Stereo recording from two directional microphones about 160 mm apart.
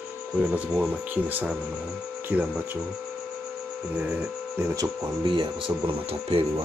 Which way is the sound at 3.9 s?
10° right (ahead or behind).